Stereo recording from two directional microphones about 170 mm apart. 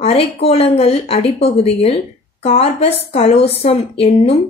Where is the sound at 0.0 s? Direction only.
35° left (ahead or behind).